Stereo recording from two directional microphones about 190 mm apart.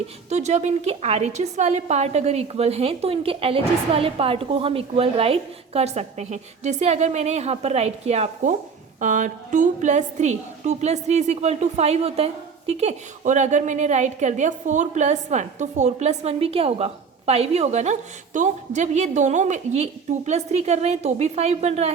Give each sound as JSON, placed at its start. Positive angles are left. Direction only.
{"t": 0.3, "sound": "a woman's voice", "side_deg": -35}